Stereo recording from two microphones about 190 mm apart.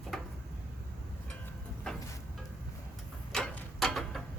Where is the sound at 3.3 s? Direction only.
5° left (ahead or behind).